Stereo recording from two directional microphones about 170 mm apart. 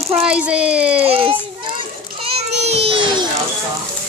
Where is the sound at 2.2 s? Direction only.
35° right (ahead or behind).